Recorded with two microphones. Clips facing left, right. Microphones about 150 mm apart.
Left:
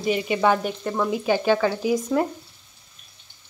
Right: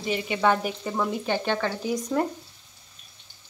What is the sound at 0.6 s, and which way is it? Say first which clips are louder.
Speech: left 3 dB; 5° right (ahead or behind).